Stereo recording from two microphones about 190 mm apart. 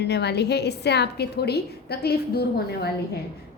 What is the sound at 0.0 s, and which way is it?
A woman's voice, 60° left (ahead or behind).